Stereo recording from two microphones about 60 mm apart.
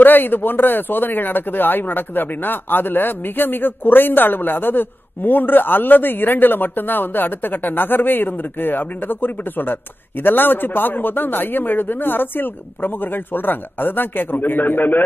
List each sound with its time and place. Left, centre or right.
0.0 s speech: left